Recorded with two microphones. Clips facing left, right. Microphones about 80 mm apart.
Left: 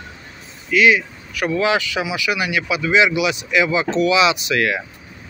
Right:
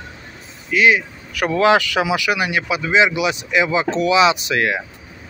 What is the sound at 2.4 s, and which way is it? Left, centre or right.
Speech, right.